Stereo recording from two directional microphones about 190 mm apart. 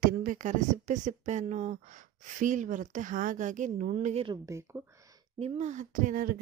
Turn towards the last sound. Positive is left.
turn(degrees=-45)  # may be behind; listen again after turning